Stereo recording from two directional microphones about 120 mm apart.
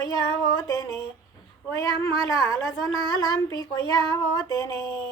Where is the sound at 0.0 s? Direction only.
35° left (ahead or behind).